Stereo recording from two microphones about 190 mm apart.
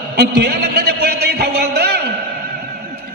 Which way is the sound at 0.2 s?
60° right (ahead or behind).